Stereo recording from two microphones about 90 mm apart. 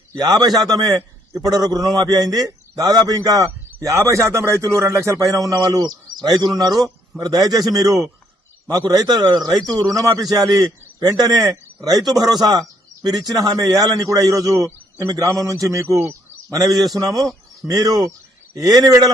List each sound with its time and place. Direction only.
0.2 s a man's voice: 45° right (ahead or behind)
9.0 s a man's voice: 50° right (ahead or behind); by 16.1 s 30° right (ahead or behind)
16.5 s a man's voice: 40° right (ahead or behind)